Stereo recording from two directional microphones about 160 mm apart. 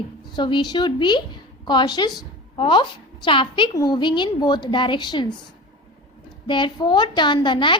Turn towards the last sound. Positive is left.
turn(degrees=30)  # may be behind; listen again after turning